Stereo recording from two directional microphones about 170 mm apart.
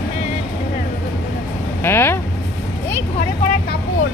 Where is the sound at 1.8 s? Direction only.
15° left (ahead or behind).